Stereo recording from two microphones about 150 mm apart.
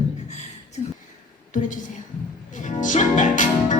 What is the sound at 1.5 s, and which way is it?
A woman's voice, 60° left (ahead or behind).